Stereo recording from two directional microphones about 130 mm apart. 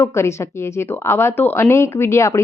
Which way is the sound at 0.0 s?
20° left (ahead or behind).